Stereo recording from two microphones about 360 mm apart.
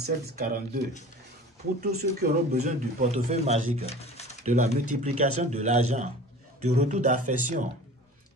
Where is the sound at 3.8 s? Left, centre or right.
Centre.